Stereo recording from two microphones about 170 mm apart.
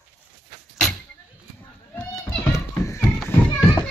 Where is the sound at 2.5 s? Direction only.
20° left (ahead or behind).